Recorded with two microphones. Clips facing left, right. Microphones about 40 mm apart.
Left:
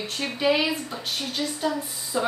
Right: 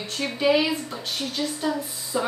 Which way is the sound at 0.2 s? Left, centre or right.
Centre.